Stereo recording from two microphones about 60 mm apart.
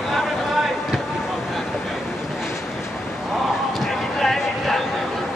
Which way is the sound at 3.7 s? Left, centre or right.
Centre.